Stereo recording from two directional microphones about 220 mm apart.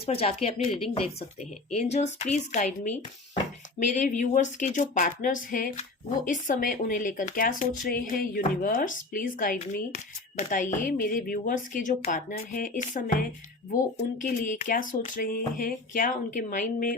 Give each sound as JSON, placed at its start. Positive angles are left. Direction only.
{"t": 0.0, "sound": "a woman's voice", "side_deg": 25}